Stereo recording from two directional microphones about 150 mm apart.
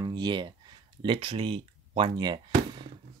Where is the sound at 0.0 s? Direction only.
30° right (ahead or behind).